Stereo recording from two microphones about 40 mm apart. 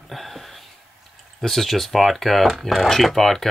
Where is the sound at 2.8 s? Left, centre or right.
Centre.